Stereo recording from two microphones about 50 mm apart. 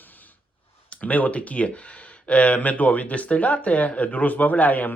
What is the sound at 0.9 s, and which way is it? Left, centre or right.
Speech, left.